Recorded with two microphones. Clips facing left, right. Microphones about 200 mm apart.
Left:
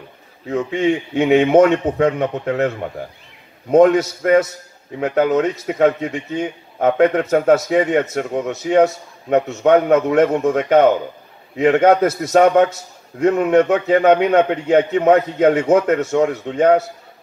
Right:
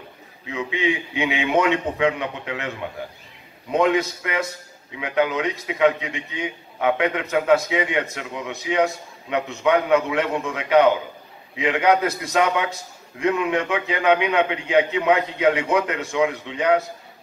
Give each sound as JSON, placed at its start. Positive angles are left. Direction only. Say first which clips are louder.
{"t": 0.5, "sound": "a man's voice", "louder": "left 6 dB", "side_deg": 45}